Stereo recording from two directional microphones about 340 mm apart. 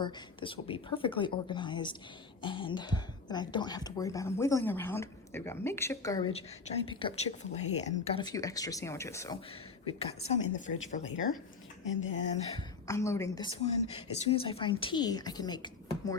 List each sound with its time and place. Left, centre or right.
0.0 s a woman's voice: centre
12.5 s speech: centre